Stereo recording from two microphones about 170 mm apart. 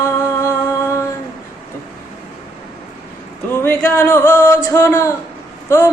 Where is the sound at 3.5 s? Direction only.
15° left (ahead or behind).